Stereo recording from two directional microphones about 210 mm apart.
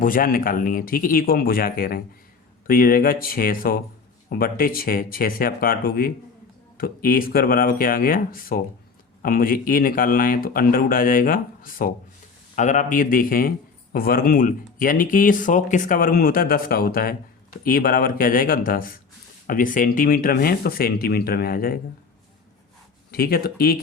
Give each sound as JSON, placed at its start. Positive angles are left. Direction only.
{"t": 0.0, "sound": "speech", "side_deg": 40}
{"t": 23.1, "sound": "speech", "side_deg": 45}